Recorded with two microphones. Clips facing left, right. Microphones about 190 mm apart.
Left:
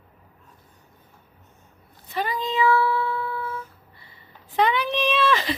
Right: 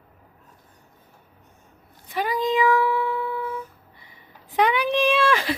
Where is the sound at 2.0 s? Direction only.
10° right (ahead or behind).